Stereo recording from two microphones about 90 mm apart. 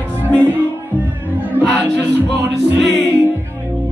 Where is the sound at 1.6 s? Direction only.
20° right (ahead or behind).